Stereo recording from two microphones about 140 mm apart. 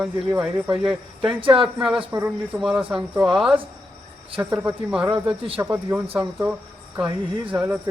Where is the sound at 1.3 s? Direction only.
40° right (ahead or behind).